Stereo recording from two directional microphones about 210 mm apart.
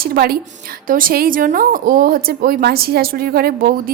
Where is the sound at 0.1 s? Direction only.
45° right (ahead or behind).